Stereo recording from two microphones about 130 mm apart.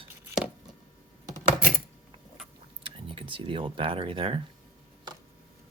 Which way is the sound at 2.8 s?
45° right (ahead or behind).